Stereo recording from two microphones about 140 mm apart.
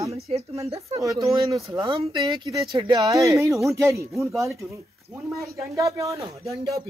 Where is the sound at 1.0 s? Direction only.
25° right (ahead or behind).